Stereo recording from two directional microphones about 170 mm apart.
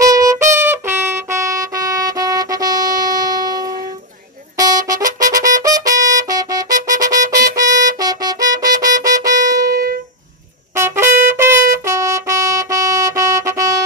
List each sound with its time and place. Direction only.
0.0 s brass instrument: 20° right (ahead or behind)
0.6 s music: 15° right (ahead or behind)
4.6 s trumpet: 20° right (ahead or behind)
9.7 s music: 60° right (ahead or behind)
10.7 s trumpet: 15° right (ahead or behind)